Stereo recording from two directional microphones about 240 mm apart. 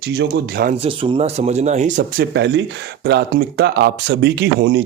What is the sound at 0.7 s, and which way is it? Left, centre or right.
Speech, right.